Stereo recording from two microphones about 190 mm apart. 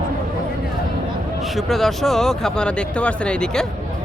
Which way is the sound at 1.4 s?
Centre (ahead or behind).